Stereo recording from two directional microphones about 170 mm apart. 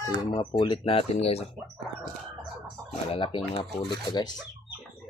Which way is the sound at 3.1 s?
30° left (ahead or behind).